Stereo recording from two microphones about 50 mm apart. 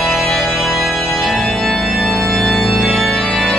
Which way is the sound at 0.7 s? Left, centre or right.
Centre.